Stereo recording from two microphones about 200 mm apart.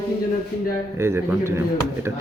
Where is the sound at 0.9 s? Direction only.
15° right (ahead or behind).